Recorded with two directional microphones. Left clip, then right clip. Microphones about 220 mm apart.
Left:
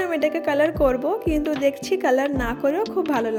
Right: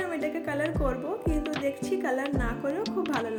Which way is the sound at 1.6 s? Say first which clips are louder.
Left 10 dB; 40° left (ahead or behind).